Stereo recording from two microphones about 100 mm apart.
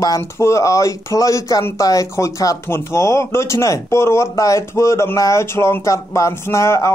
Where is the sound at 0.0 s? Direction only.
35° left (ahead or behind).